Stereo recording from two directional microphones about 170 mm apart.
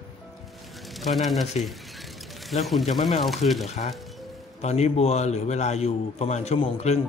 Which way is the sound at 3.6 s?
40° left (ahead or behind).